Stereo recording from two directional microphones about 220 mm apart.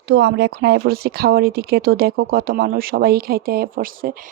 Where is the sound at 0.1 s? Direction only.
50° right (ahead or behind).